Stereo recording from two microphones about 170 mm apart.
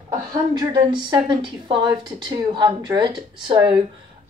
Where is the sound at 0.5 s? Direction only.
25° right (ahead or behind).